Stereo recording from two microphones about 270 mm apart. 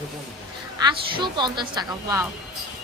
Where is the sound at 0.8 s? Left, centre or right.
Centre.